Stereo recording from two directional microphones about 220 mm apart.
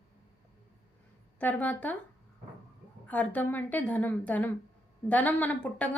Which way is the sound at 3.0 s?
5° left (ahead or behind).